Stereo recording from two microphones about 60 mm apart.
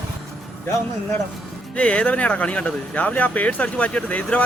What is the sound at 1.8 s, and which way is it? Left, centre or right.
Speech, centre.